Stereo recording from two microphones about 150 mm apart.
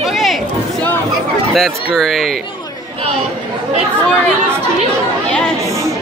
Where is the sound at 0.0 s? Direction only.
Centre (ahead or behind).